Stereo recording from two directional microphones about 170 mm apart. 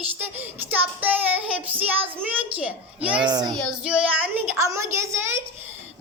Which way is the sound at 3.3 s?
25° right (ahead or behind).